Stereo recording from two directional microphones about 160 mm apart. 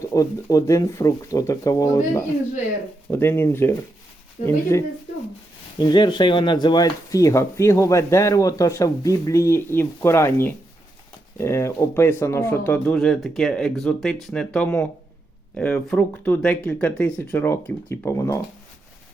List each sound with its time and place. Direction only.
0.0 s speech: 20° left (ahead or behind)
3.1 s speech: 15° left (ahead or behind)